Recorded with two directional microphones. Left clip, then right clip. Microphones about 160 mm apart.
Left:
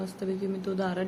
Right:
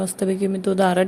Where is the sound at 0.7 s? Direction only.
55° right (ahead or behind).